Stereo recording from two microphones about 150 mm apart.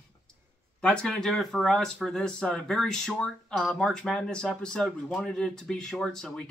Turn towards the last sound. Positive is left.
turn(degrees=5)  # may be behind; listen again after turning